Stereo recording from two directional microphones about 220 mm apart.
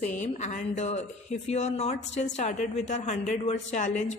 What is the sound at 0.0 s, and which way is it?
A woman's voice, 35° left (ahead or behind).